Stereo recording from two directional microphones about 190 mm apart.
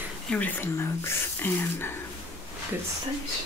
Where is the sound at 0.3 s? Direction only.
10° left (ahead or behind).